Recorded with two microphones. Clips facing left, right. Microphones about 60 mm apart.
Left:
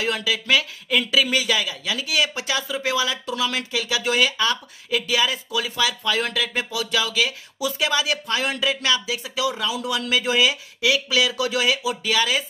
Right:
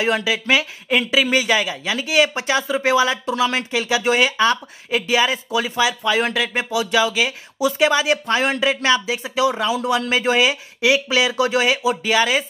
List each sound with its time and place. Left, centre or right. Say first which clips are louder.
0.0 s speech: right 4 dB; right